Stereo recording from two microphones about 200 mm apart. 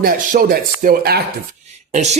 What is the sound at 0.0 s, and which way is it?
Speech, 50° right (ahead or behind).